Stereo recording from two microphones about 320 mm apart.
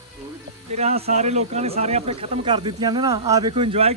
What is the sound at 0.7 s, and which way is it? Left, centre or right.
Speech, centre.